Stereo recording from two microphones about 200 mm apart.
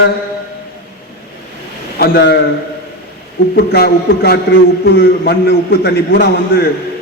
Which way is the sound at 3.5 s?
50° left (ahead or behind).